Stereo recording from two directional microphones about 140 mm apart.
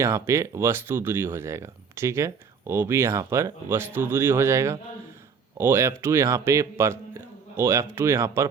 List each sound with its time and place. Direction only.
0.0 s speech: 20° right (ahead or behind)